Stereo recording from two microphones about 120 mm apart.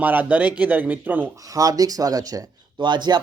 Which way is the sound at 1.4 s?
30° right (ahead or behind).